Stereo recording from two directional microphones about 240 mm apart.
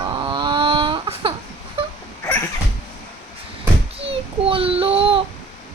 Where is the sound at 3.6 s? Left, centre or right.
Right.